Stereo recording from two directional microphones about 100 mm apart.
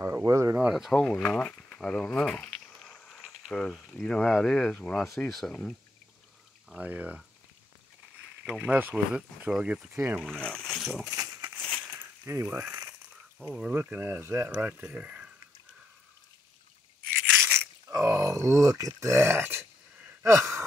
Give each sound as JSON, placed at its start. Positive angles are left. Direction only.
{"t": 0.0, "sound": "speech", "side_deg": -30}
{"t": 0.6, "sound": "speech", "side_deg": -5}
{"t": 0.9, "sound": "speech", "side_deg": 10}
{"t": 6.8, "sound": "speech", "side_deg": -15}
{"t": 8.5, "sound": "speech", "side_deg": -15}
{"t": 10.2, "sound": "speech", "side_deg": 10}
{"t": 11.1, "sound": "speech", "side_deg": -30}
{"t": 12.0, "sound": "coin", "side_deg": -25}
{"t": 12.4, "sound": "speech", "side_deg": -15}
{"t": 14.5, "sound": "speech", "side_deg": -15}
{"t": 17.3, "sound": "crunch", "side_deg": -5}
{"t": 17.9, "sound": "speech", "side_deg": -30}
{"t": 20.2, "sound": "sigh", "side_deg": -30}